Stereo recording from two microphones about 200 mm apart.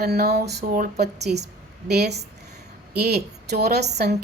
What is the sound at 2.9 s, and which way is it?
A woman's voice, 55° right (ahead or behind).